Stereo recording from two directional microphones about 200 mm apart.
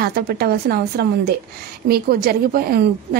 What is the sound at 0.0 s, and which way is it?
A woman's voice, 50° right (ahead or behind).